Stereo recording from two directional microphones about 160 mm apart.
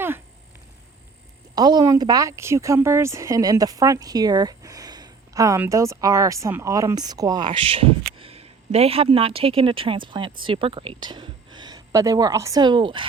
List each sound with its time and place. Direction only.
1.5 s a woman's voice: 25° right (ahead or behind)